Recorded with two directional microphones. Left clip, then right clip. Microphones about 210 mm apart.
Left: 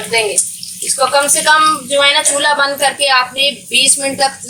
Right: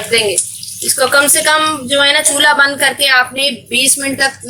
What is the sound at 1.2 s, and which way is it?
A woman's voice, 30° right (ahead or behind).